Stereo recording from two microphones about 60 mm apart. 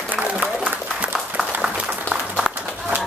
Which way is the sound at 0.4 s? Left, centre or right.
Centre.